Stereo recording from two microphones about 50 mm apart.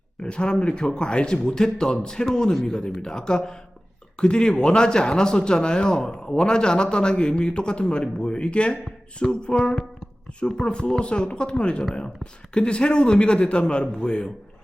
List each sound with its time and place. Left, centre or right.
0.2 s a man's voice: centre